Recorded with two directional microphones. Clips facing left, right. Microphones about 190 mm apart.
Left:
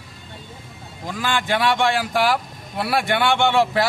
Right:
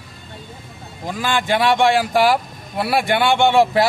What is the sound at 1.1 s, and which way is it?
A man's voice, 15° right (ahead or behind).